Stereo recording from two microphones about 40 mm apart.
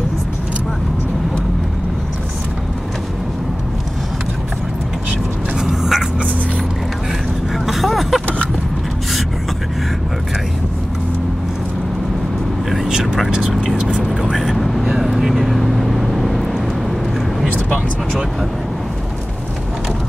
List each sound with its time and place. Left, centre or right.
5.6 s a sound: centre
7.5 s vehicle: centre
13.4 s vehicle: centre
13.7 s vehicle: right
14.3 s vehicle: centre